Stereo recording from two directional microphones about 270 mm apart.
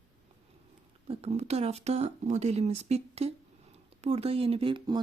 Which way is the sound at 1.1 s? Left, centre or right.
Right.